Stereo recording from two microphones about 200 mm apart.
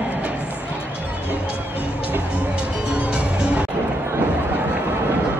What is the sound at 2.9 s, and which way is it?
Music, 5° right (ahead or behind).